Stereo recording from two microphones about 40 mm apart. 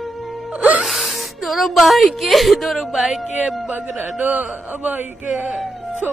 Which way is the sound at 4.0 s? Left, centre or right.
Right.